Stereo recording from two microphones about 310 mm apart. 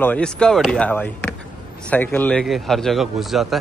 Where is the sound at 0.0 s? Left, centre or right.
Centre.